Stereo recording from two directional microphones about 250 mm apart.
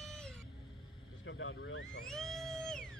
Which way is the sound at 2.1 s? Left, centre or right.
Centre.